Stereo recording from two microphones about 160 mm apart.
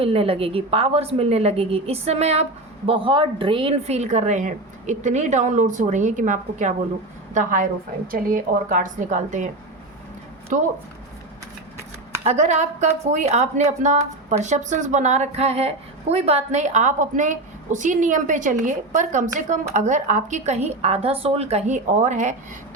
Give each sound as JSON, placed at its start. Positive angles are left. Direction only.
{"t": 0.0, "sound": "a woman's voice", "side_deg": -35}
{"t": 12.2, "sound": "a woman's voice", "side_deg": -45}